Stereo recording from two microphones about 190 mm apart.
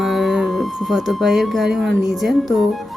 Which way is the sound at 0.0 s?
Centre (ahead or behind).